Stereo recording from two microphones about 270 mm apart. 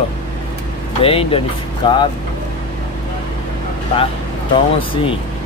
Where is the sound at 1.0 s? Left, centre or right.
Left.